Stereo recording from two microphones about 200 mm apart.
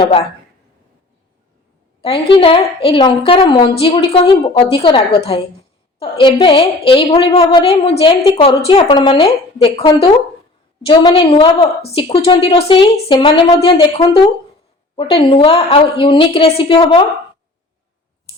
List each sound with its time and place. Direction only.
0.0 s a woman's voice: 30° left (ahead or behind)
2.0 s a woman's voice: 30° left (ahead or behind)